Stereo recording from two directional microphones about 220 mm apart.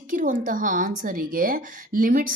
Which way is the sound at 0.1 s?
35° right (ahead or behind).